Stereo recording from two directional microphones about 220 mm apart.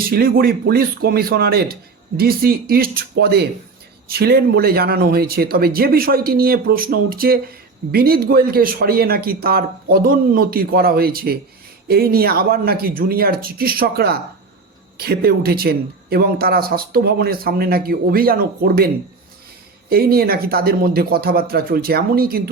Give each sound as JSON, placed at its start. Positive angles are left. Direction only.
{"t": 0.1, "sound": "speech", "side_deg": -45}
{"t": 19.9, "sound": "speech", "side_deg": -45}